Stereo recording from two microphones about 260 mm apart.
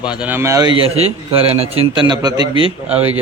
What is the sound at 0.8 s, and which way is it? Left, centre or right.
A man's voice, right.